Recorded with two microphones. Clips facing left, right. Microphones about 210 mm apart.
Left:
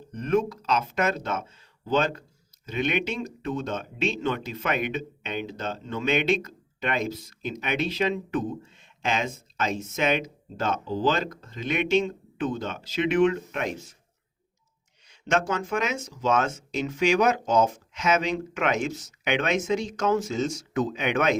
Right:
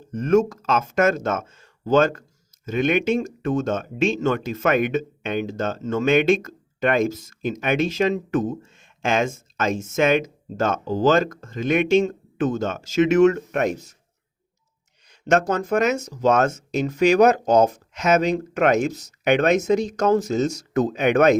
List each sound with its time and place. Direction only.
0.1 s speech: 45° right (ahead or behind)
15.0 s speech: 40° right (ahead or behind)